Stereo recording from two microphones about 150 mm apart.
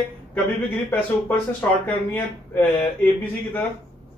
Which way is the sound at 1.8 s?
10° left (ahead or behind).